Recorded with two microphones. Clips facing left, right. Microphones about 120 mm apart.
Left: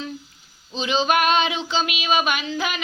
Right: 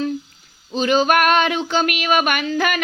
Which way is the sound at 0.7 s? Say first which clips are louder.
Right 5 dB; 50° right (ahead or behind).